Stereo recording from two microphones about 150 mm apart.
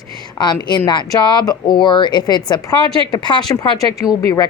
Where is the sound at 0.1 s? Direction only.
30° left (ahead or behind).